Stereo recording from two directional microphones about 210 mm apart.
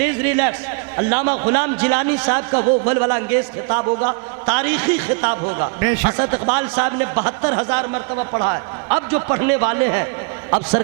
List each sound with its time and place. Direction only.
0.0 s a man's voice: 15° right (ahead or behind)